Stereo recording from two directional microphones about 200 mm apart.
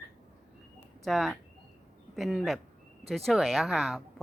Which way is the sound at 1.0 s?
Centre (ahead or behind).